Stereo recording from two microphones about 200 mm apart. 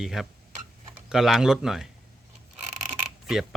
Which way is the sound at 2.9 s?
Centre (ahead or behind).